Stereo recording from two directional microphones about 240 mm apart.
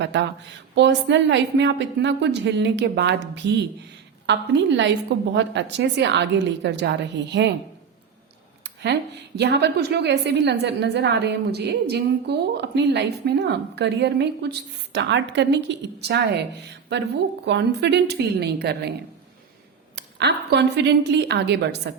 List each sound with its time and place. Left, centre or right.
0.0 s a woman's voice: right
8.6 s a woman's voice: right
17.4 s a woman's voice: right
20.0 s a woman's voice: right